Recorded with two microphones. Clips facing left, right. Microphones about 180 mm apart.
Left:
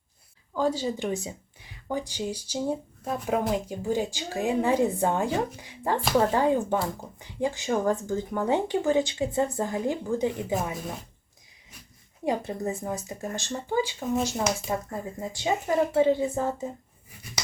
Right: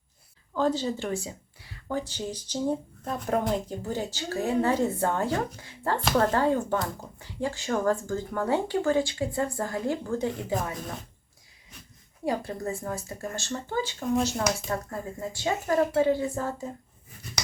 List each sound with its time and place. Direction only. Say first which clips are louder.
0.5 s speech: even; 10° left (ahead or behind)
6.1 s speech: left 1 dB; centre (ahead or behind)
6.3 s speech: left 1 dB; 15° left (ahead or behind)
12.2 s speech: left 2 dB; 20° left (ahead or behind)
14.0 s speech: right 1 dB; centre (ahead or behind); by 16.6 s 20° left (ahead or behind)